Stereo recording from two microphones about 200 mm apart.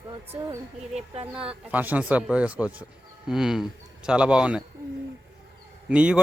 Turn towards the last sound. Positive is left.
turn(degrees=-5)  # may be behind; listen again after turning